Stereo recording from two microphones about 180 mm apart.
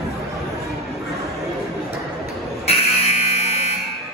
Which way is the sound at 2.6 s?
35° left (ahead or behind).